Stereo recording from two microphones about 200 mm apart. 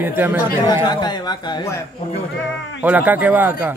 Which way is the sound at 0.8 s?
20° left (ahead or behind).